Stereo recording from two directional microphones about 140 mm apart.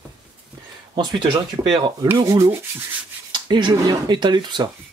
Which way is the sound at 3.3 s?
35° right (ahead or behind).